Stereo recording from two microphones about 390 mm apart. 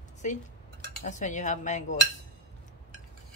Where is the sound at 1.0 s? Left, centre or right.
Centre.